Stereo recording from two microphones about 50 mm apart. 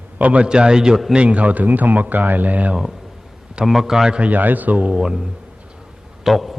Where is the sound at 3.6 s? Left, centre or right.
Centre.